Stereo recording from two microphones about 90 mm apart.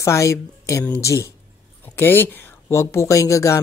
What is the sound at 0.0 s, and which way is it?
A man's voice, 35° left (ahead or behind).